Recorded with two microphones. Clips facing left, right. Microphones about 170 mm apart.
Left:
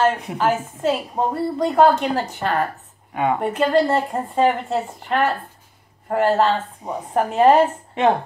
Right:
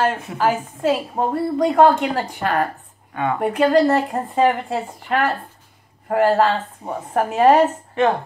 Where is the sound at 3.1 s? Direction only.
20° left (ahead or behind).